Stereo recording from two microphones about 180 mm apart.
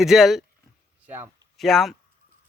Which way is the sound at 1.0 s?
10° right (ahead or behind).